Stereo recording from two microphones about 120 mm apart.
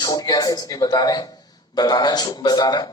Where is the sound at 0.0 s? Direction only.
30° left (ahead or behind).